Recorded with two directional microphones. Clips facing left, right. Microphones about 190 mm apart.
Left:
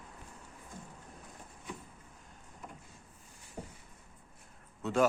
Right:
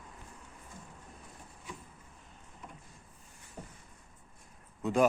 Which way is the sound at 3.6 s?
10° left (ahead or behind).